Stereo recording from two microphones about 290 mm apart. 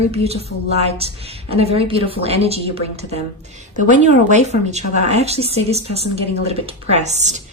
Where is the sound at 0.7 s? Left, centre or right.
Right.